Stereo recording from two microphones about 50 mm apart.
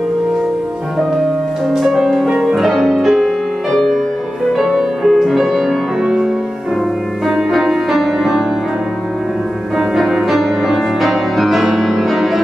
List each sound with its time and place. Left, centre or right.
1.7 s music: centre
3.7 s music: centre
7.2 s music: centre
9.8 s music: centre